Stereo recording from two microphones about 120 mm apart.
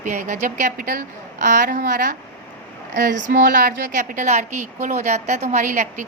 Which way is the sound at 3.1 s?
90° right.